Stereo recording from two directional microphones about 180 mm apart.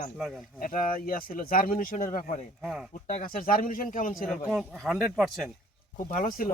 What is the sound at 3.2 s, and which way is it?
Speech, 50° left (ahead or behind).